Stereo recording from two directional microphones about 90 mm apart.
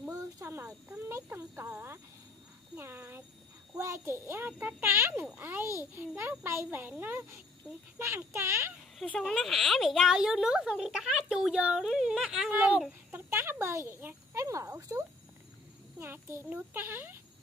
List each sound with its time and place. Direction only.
0.1 s a sound: 30° right (ahead or behind)
1.0 s a child's voice: 25° right (ahead or behind)
8.9 s a woman's voice: 5° left (ahead or behind); by 12.8 s 15° right (ahead or behind)
13.1 s a child's voice: 25° right (ahead or behind)